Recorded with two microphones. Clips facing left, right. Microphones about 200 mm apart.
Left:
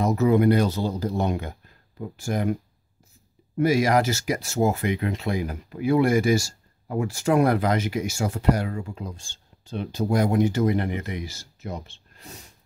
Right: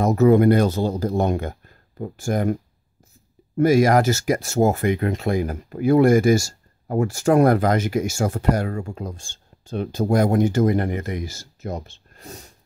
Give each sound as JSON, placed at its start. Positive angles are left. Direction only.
{"t": 0.0, "sound": "speech", "side_deg": -50}
{"t": 3.5, "sound": "speech", "side_deg": -45}